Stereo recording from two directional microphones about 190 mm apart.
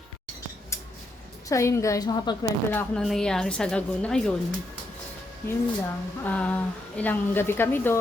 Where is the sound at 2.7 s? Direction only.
Centre (ahead or behind).